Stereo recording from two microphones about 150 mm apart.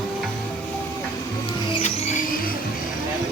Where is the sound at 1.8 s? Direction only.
50° left (ahead or behind).